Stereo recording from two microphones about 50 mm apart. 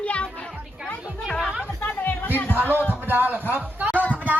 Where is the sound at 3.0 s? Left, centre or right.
Right.